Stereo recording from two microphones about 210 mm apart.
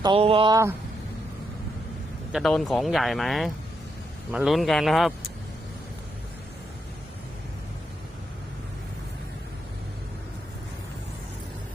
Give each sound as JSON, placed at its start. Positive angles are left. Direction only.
{"t": 0.0, "sound": "speech", "side_deg": -25}
{"t": 2.3, "sound": "speech", "side_deg": 0}